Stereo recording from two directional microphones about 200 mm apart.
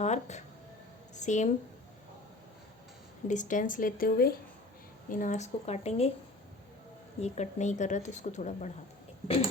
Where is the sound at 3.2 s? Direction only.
40° left (ahead or behind).